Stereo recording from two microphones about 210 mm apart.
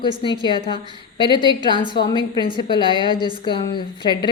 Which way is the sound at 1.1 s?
20° left (ahead or behind).